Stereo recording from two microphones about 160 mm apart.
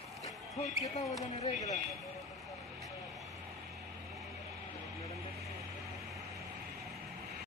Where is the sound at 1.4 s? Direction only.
45° left (ahead or behind).